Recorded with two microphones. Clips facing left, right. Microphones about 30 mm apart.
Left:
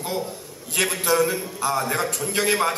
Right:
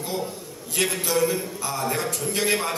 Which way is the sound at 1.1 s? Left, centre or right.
Centre.